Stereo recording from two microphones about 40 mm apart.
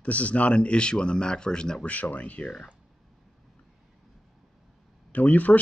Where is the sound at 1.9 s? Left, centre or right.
Left.